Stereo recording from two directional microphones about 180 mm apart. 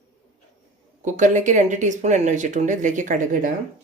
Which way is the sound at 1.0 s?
45° right (ahead or behind).